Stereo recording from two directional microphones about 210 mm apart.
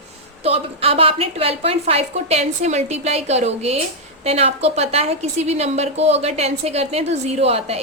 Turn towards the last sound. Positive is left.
turn(degrees=-30)  # may be behind; listen again after turning